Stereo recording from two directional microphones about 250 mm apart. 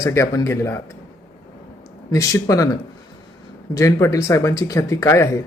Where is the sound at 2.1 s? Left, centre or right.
Centre.